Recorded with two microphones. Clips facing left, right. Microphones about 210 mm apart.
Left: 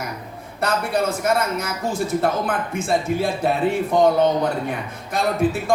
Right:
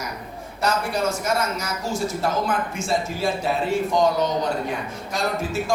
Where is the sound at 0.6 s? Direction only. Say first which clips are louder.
Left 2 dB; 55° left (ahead or behind).